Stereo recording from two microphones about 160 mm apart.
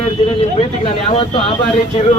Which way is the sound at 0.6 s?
40° left (ahead or behind).